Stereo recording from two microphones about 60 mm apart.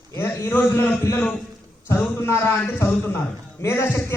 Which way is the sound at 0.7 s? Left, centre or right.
Left.